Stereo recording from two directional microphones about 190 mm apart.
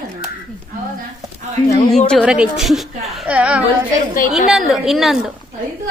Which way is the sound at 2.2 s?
5° right (ahead or behind).